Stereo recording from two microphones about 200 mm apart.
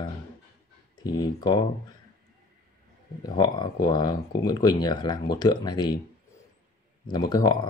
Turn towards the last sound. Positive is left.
turn(degrees=20)  # may be behind; listen again after turning